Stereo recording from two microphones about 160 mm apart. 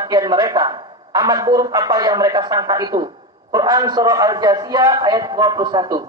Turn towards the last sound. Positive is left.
turn(degrees=-25)  # may be behind; listen again after turning